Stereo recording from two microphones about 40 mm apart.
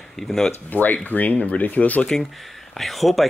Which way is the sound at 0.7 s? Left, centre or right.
Left.